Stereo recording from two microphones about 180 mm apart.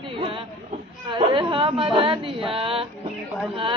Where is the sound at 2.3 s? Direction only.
30° right (ahead or behind).